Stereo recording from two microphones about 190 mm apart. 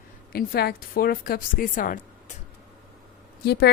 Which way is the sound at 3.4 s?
60° left (ahead or behind).